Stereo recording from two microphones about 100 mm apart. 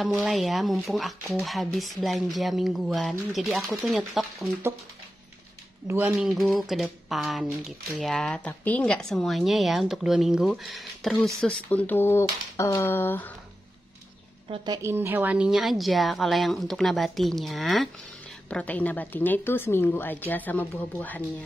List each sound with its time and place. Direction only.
0.2 s a woman's voice: centre (ahead or behind)
5.9 s speech: 20° right (ahead or behind)
6.1 s a woman's voice: centre (ahead or behind)
11.4 s a woman's voice: 15° left (ahead or behind)
14.8 s a woman's voice: 25° right (ahead or behind); by 17.8 s centre (ahead or behind)
18.5 s a woman's voice: 15° left (ahead or behind)